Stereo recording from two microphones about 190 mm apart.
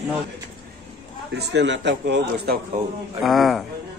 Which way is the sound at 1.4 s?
70° right (ahead or behind).